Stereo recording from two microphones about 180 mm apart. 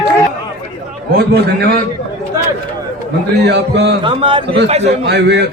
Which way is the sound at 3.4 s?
70° right (ahead or behind).